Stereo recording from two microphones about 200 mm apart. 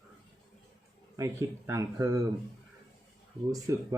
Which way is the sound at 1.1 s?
15° right (ahead or behind).